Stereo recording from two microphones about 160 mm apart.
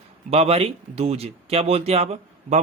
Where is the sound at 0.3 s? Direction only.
40° right (ahead or behind).